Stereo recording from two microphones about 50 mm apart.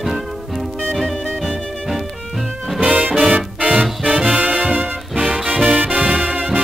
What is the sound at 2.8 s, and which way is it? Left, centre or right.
Music, right.